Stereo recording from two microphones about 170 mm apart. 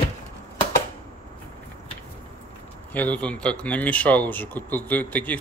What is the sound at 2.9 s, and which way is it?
Speech, 10° left (ahead or behind).